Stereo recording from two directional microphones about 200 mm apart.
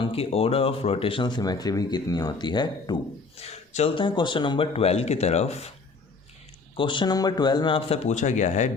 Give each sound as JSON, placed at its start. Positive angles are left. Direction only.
{"t": 0.0, "sound": "speech", "side_deg": 30}
{"t": 6.7, "sound": "speech", "side_deg": 25}